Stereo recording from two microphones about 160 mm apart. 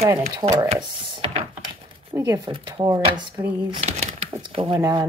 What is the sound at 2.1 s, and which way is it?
Speech, 20° right (ahead or behind).